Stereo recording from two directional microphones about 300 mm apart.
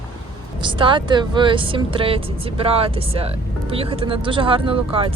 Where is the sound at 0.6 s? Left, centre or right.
Centre.